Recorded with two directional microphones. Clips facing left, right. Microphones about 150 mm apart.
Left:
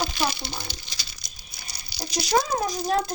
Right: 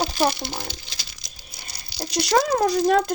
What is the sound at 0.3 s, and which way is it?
Speech, 80° right.